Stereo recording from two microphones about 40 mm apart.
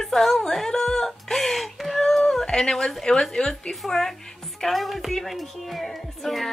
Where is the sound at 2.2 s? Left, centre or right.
Centre.